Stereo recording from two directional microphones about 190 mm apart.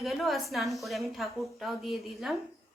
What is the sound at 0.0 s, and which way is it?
A woman's voice, centre (ahead or behind).